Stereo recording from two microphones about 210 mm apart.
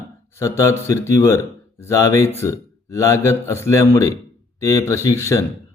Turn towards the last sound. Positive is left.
turn(degrees=15)  # may be behind; listen again after turning